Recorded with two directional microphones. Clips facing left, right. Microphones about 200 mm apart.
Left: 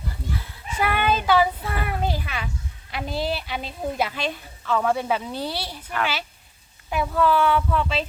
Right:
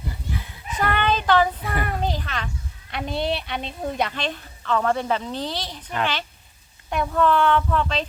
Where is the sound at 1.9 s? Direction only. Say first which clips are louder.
Even; 10° left (ahead or behind).